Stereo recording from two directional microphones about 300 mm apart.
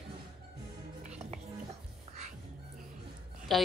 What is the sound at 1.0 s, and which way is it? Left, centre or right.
Music, right.